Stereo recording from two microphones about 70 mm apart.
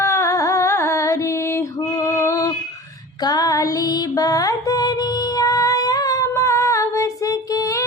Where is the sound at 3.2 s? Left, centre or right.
Left.